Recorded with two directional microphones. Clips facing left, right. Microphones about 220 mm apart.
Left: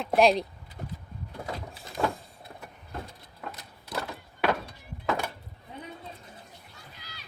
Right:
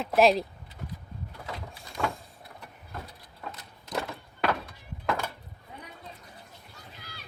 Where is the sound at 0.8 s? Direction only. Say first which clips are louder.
Left 2 dB; 45° left (ahead or behind).